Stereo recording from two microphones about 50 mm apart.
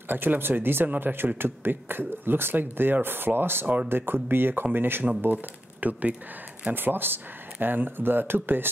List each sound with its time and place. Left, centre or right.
0.1 s speech: right
6.7 s speech: right